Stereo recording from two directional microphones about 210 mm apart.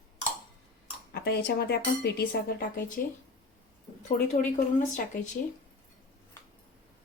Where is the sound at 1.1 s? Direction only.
50° left (ahead or behind).